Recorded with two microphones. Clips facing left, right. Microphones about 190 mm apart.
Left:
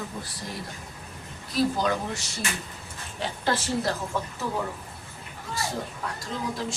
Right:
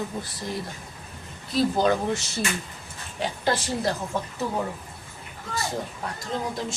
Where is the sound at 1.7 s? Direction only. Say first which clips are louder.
Right 5 dB; 25° right (ahead or behind).